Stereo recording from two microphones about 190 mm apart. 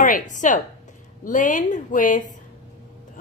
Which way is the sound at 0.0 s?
45° left (ahead or behind).